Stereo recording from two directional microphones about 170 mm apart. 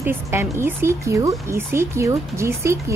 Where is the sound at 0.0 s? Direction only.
15° right (ahead or behind).